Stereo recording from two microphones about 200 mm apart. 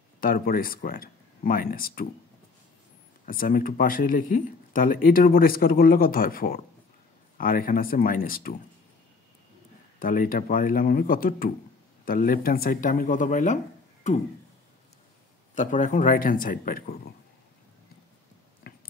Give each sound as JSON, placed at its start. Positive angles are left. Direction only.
{"t": 0.2, "sound": "speech", "side_deg": 45}
{"t": 3.3, "sound": "speech", "side_deg": 45}
{"t": 9.9, "sound": "speech", "side_deg": 45}
{"t": 15.5, "sound": "a man's voice", "side_deg": 40}